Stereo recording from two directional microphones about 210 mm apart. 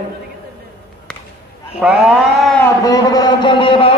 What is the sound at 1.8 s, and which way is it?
Speech, 5° right (ahead or behind).